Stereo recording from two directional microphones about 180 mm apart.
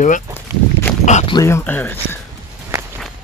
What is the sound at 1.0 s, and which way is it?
Speech, 40° left (ahead or behind).